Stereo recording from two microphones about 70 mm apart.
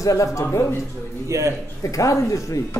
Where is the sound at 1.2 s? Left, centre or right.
Right.